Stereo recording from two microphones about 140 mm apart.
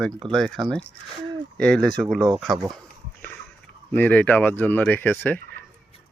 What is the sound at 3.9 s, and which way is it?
Speech, 10° left (ahead or behind).